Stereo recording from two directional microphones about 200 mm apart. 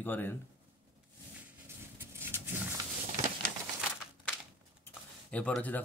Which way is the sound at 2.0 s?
10° right (ahead or behind).